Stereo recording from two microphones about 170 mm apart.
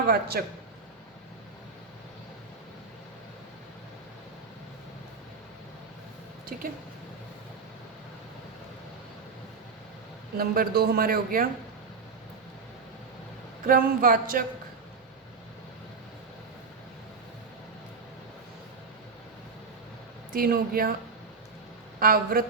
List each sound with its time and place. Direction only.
0.1 s a man's voice: 65° right (ahead or behind)
6.5 s a man's voice: 60° right (ahead or behind)
10.3 s a man's voice: 60° right (ahead or behind)
13.7 s a man's voice: 55° right (ahead or behind)
20.3 s a man's voice: 60° right (ahead or behind)
22.0 s a man's voice: 60° right (ahead or behind)